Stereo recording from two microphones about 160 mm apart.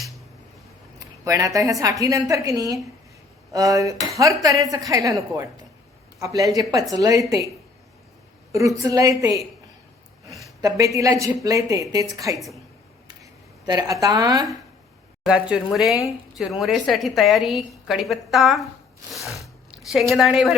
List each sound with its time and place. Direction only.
0.9 s a woman's voice: 20° right (ahead or behind)
6.1 s a woman's voice: 20° right (ahead or behind)
8.5 s a woman's voice: 20° right (ahead or behind)
10.6 s a woman's voice: 20° right (ahead or behind)
13.7 s a woman's voice: 25° right (ahead or behind)
15.3 s a woman's voice: 5° right (ahead or behind)
19.2 s biting: 20° left (ahead or behind)
19.9 s a woman's voice: centre (ahead or behind)